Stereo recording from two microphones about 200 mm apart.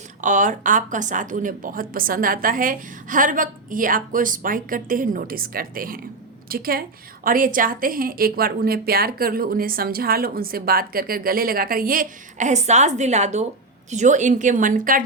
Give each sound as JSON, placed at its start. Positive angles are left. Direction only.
{"t": 0.2, "sound": "a woman's voice", "side_deg": -40}